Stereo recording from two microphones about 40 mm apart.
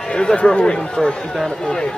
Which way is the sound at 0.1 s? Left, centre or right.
Left.